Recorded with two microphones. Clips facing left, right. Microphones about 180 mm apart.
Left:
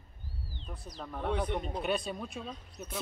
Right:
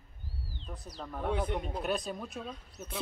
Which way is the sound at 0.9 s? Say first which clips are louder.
Even; 5° right (ahead or behind).